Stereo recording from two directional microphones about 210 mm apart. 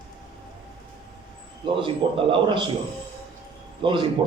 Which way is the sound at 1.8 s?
25° right (ahead or behind).